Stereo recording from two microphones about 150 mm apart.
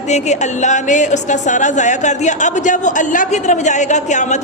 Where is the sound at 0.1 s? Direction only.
50° left (ahead or behind).